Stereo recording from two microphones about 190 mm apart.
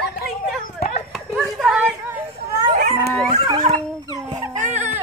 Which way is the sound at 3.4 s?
25° right (ahead or behind).